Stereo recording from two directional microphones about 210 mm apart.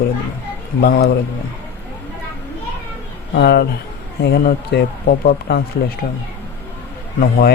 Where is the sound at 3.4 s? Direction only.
50° left (ahead or behind).